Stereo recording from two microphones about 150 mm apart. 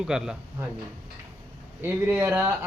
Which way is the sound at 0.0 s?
5° right (ahead or behind).